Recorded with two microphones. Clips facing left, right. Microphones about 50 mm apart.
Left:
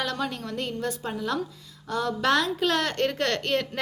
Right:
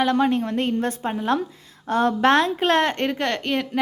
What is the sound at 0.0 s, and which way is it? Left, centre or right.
A woman's voice, right.